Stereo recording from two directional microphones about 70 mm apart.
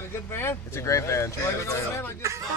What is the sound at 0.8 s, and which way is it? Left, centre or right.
Speech, left.